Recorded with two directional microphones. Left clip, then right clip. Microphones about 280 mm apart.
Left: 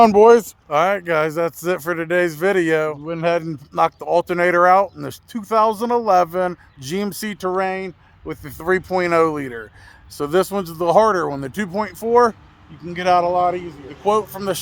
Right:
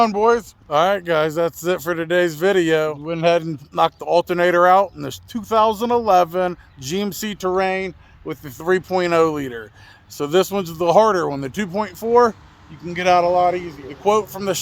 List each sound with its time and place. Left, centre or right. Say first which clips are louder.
0.0 s speech: left 6 dB; left
0.7 s speech: even; centre